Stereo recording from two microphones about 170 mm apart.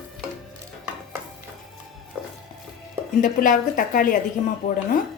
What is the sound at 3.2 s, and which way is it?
A woman's voice, 50° left (ahead or behind).